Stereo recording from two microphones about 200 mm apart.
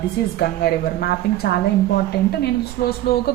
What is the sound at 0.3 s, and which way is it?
Speech, 50° left (ahead or behind).